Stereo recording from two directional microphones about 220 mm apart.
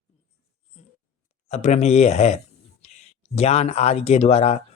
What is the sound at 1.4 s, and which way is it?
Speech, 30° left (ahead or behind).